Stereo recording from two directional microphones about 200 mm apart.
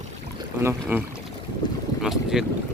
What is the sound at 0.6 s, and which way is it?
Speech, 10° right (ahead or behind).